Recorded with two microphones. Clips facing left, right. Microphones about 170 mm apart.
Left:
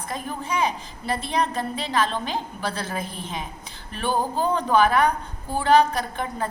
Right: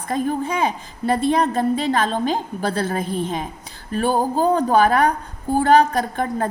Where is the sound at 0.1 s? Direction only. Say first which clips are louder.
Right 8 dB; 50° right (ahead or behind).